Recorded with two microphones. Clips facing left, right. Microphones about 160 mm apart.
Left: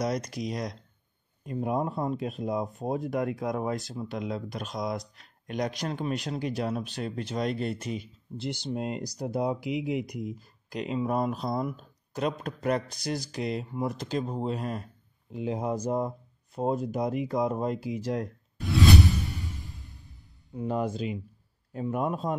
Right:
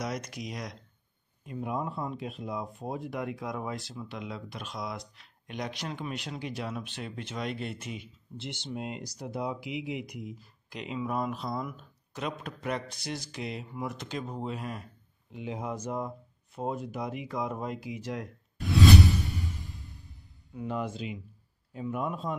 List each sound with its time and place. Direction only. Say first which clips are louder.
0.0 s speech: left 6 dB; 35° left (ahead or behind)
20.5 s a man's voice: left 4 dB; 40° left (ahead or behind)